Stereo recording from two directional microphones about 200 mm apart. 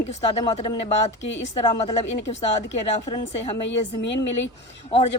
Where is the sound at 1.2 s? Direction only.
65° left (ahead or behind).